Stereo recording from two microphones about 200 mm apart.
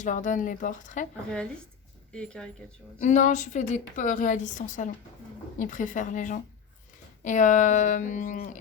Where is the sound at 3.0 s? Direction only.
40° left (ahead or behind).